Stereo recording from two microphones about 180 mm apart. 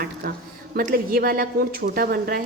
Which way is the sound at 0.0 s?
60° right (ahead or behind).